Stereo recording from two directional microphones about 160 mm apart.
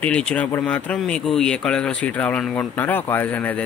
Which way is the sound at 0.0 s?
5° left (ahead or behind).